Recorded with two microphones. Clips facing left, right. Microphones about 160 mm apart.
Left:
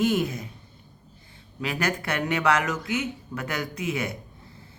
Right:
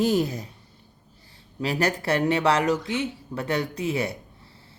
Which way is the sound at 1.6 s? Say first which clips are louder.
Right 3 dB; 35° right (ahead or behind).